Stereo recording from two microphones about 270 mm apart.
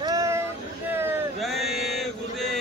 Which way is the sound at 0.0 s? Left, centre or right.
Centre.